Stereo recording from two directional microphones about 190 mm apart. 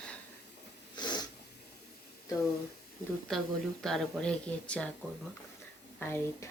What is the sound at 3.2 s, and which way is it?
Speech, centre (ahead or behind).